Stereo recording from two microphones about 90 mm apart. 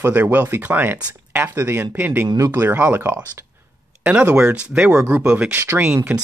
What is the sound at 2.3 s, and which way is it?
Speech, 35° right (ahead or behind).